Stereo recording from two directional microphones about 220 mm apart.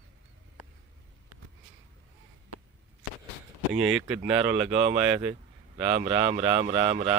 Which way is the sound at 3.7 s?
5° right (ahead or behind).